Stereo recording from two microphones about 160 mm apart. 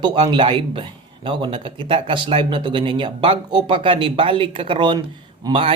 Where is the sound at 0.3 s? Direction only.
30° right (ahead or behind).